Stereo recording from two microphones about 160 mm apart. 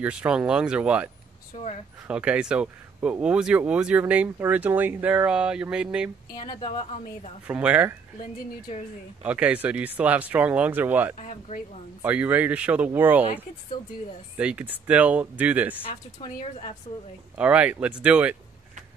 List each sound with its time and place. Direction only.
0.0 s speech: 10° right (ahead or behind)
6.3 s speech: 35° left (ahead or behind)
7.4 s speech: 10° right (ahead or behind)
9.2 s speech: 10° right (ahead or behind)
11.1 s speech: 45° left (ahead or behind)
12.0 s speech: 10° right (ahead or behind)
14.3 s speech: 10° right (ahead or behind)
17.4 s speech: 10° right (ahead or behind)